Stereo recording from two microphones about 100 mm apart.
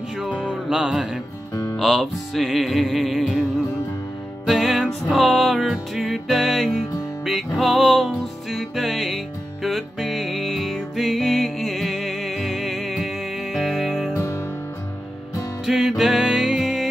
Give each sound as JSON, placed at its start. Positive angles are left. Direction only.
{"t": 0.5, "sound": "music", "side_deg": -5}
{"t": 1.5, "sound": "music", "side_deg": 30}
{"t": 1.8, "sound": "music", "side_deg": 0}
{"t": 14.1, "sound": "music", "side_deg": 25}
{"t": 15.6, "sound": "music", "side_deg": -5}